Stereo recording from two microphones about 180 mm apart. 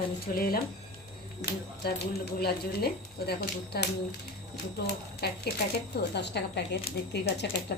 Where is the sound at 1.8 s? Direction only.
60° left (ahead or behind).